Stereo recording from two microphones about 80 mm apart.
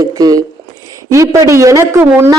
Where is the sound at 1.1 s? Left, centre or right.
Right.